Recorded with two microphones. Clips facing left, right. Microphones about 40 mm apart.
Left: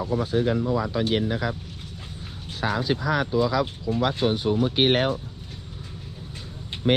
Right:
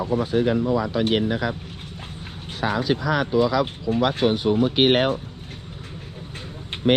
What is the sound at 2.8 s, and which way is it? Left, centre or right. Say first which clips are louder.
Speech: right 2 dB; right.